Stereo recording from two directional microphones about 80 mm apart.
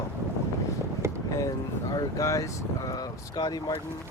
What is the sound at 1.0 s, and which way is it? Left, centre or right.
Boat, right.